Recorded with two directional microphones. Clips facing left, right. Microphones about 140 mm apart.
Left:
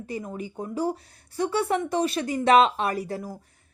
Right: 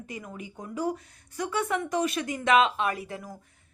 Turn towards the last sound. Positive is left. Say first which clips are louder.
# left 3 dB
turn(degrees=35)  # may be behind; listen again after turning